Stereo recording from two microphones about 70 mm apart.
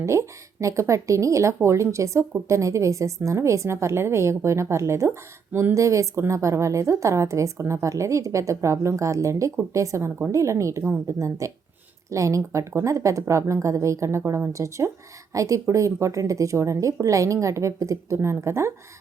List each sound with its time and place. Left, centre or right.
0.0 s a woman's voice: right